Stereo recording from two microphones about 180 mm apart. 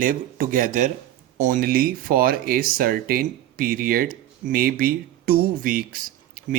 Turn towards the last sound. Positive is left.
turn(degrees=-50)  # may be behind; listen again after turning